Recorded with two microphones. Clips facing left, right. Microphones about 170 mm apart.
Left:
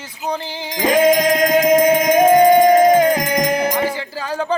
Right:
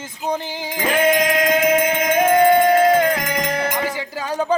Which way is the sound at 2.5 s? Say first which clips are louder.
Left 3 dB; 15° left (ahead or behind).